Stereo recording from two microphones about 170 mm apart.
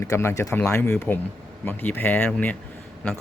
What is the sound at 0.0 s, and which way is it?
Speech, 15° left (ahead or behind).